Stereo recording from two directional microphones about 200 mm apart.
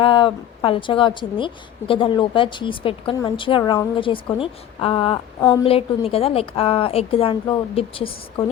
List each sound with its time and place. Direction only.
0.0 s a woman's voice: 25° left (ahead or behind)
5.4 s a woman's voice: 15° left (ahead or behind)
5.6 s a woman's voice: 30° left (ahead or behind)